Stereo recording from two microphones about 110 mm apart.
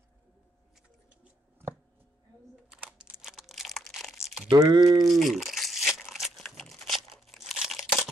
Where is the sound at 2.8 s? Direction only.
5° right (ahead or behind).